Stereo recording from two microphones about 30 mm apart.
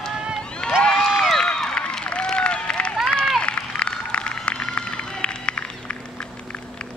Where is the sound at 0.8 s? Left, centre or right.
Left.